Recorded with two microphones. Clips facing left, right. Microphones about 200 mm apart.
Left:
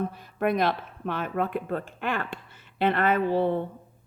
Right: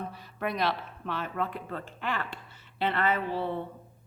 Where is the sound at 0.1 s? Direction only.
50° left (ahead or behind).